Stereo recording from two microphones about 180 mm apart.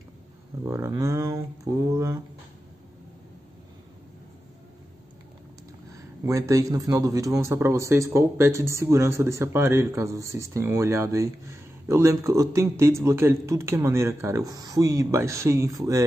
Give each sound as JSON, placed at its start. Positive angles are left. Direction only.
{"t": 0.7, "sound": "speech", "side_deg": -15}
{"t": 5.9, "sound": "a man's voice", "side_deg": -15}